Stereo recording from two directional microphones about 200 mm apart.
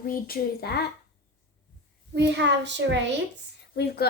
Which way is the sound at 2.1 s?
60° right (ahead or behind).